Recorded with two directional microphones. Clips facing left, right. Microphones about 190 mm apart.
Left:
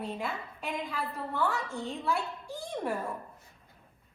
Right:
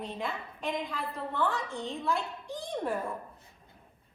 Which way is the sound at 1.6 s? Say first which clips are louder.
Even; 15° right (ahead or behind).